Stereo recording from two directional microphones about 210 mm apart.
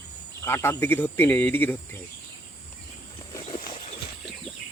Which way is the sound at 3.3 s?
20° left (ahead or behind).